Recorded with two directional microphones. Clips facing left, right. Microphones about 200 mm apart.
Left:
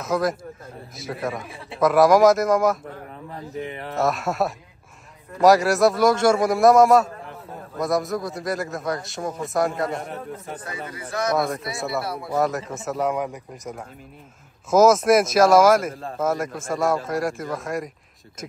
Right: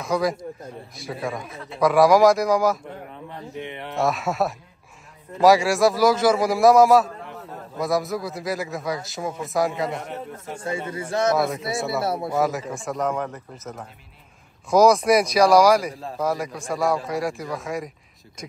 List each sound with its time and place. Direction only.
0.0 s a man's voice: centre (ahead or behind)
10.6 s a man's voice: 25° right (ahead or behind)
11.3 s a man's voice: centre (ahead or behind)
12.0 s a man's voice: 25° right (ahead or behind)
12.3 s a man's voice: centre (ahead or behind)
14.7 s a man's voice: centre (ahead or behind)